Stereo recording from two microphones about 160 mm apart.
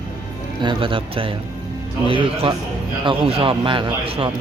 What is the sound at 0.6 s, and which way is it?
A man's voice, 30° right (ahead or behind).